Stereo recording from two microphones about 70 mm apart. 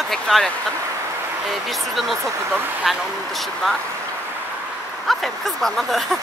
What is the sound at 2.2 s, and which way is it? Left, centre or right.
Speech, right.